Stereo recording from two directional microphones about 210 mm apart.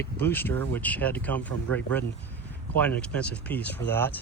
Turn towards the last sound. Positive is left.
turn(degrees=10)  # may be behind; listen again after turning